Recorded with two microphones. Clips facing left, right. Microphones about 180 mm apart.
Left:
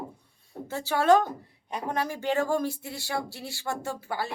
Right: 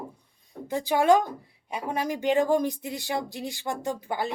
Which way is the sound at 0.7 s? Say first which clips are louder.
Right 1 dB; 15° right (ahead or behind).